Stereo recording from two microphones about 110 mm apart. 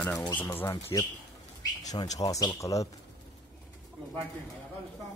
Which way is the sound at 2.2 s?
35° left (ahead or behind).